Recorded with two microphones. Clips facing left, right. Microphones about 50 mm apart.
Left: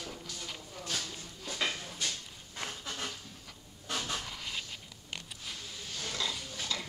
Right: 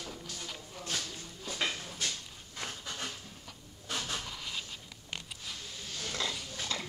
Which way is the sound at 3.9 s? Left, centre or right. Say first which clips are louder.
Left 1 dB; centre.